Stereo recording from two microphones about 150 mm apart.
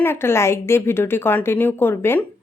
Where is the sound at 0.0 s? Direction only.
15° left (ahead or behind).